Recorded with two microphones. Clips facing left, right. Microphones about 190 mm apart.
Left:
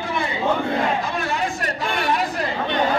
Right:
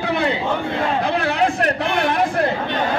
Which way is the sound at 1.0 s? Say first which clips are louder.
Right 6 dB; 60° right (ahead or behind).